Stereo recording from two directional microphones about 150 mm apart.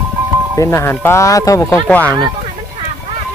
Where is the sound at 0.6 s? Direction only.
20° left (ahead or behind).